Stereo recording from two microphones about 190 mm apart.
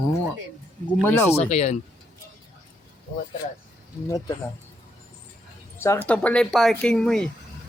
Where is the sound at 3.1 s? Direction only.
45° left (ahead or behind).